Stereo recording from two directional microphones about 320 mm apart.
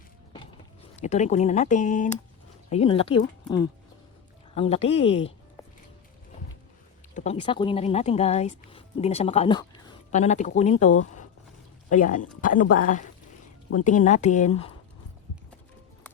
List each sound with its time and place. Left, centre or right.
0.9 s speech: left
7.1 s speech: left
11.0 s a sound: left
11.9 s speech: left